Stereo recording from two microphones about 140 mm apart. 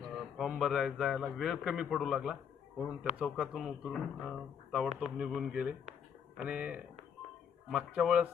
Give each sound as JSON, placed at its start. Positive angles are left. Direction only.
{"t": 0.2, "sound": "a man's voice", "side_deg": -5}